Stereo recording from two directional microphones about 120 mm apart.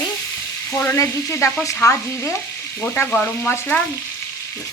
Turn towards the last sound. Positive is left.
turn(degrees=20)  # may be behind; listen again after turning